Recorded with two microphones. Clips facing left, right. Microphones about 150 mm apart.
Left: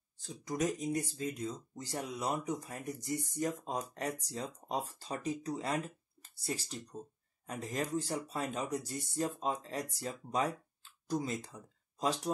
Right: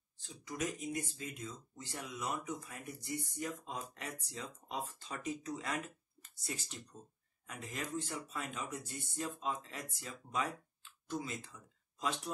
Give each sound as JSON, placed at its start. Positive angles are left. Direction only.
{"t": 0.2, "sound": "speech", "side_deg": 40}